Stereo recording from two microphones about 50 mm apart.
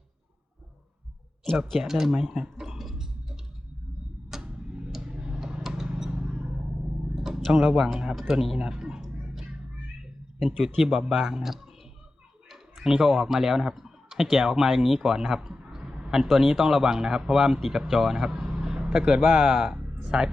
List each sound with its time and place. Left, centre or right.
1.8 s clicking: centre
4.3 s tick-tock: centre
4.9 s a sound: centre
7.5 s speech: centre
8.5 s a sound: centre
10.8 s speech: centre
12.5 s a sound: centre
13.2 s speech: centre
15.4 s a sound: centre
16.2 s speech: centre
18.4 s vehicle: centre
19.2 s speech: centre